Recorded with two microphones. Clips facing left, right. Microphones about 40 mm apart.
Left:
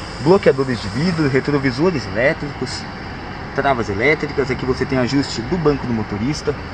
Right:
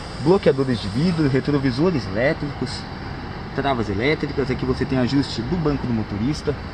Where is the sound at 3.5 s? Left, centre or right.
Left.